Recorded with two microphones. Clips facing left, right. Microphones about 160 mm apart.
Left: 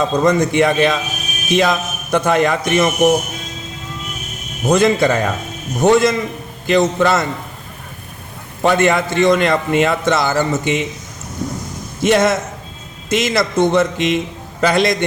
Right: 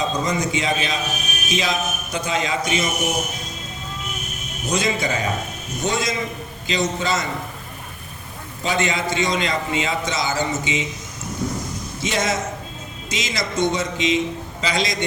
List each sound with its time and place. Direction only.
0.0 s a man's voice: 55° left (ahead or behind)
4.6 s a man's voice: 55° left (ahead or behind)
8.6 s a man's voice: 60° left (ahead or behind)
12.0 s a man's voice: 55° left (ahead or behind)